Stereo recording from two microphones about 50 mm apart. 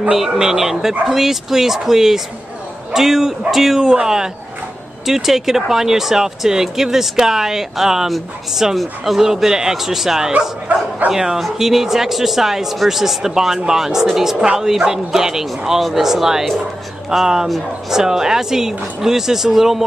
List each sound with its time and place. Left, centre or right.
0.1 s speech: centre
10.7 s speech: right
11.1 s speech: centre